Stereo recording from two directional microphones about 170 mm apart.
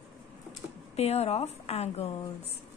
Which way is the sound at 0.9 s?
40° left (ahead or behind).